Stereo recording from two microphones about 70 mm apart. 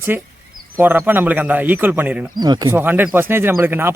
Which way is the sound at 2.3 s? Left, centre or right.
Right.